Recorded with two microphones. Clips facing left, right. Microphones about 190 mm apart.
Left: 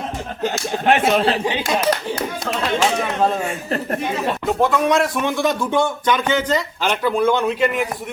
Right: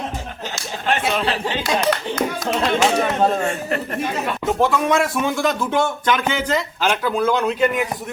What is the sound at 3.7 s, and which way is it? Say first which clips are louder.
Speech: left 1 dB; 35° left (ahead or behind).